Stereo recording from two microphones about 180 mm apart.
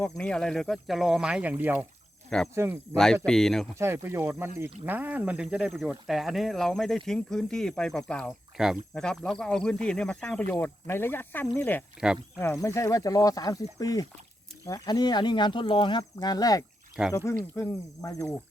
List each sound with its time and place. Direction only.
0.0 s speech: 5° left (ahead or behind); by 1.9 s 10° right (ahead or behind)
2.3 s speech: centre (ahead or behind)
2.9 s speech: 15° right (ahead or behind)
3.2 s speech: 5° left (ahead or behind)
3.8 s speech: 15° right (ahead or behind); by 11.4 s 10° left (ahead or behind)
11.9 s speech: 5° right (ahead or behind)
12.6 s speech: 15° left (ahead or behind)
17.0 s speech: 5° right (ahead or behind)
17.6 s speech: 15° left (ahead or behind)